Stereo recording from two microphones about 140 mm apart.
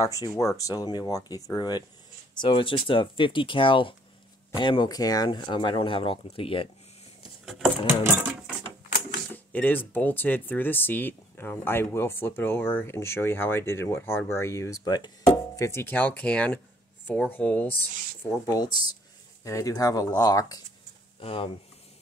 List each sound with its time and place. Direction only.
0.3 s speech: 25° left (ahead or behind); by 6.7 s 40° left (ahead or behind)
7.4 s keys jangling: centre (ahead or behind)
8.0 s a sound: 15° right (ahead or behind)
9.3 s speech: 10° left (ahead or behind)
18.3 s speech: 25° left (ahead or behind)
21.2 s speech: 40° left (ahead or behind)